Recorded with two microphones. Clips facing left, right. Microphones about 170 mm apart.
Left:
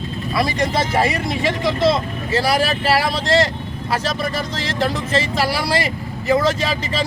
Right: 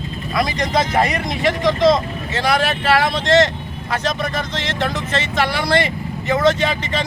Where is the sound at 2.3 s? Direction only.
35° left (ahead or behind).